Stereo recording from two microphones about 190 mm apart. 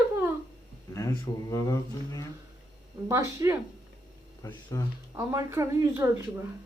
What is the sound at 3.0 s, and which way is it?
Speech, 15° right (ahead or behind).